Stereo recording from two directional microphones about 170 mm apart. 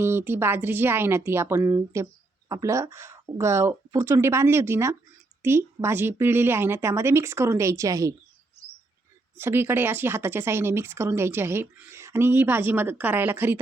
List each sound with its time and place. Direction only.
0.0 s speech: 15° right (ahead or behind)
9.4 s speech: 15° right (ahead or behind)